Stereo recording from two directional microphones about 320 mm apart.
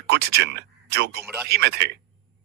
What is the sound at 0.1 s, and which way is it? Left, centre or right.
Speech, right.